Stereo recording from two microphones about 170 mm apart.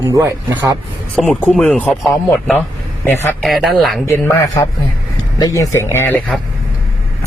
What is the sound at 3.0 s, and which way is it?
Speech, 15° left (ahead or behind).